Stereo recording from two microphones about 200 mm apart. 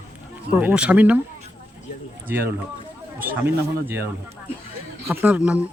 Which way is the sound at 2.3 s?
10° right (ahead or behind).